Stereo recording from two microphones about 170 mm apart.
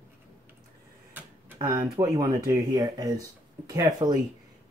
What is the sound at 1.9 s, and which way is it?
Speech, 25° right (ahead or behind).